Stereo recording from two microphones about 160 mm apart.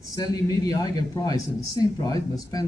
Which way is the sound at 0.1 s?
20° left (ahead or behind).